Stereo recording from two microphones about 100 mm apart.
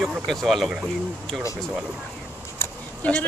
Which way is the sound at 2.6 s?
25° left (ahead or behind).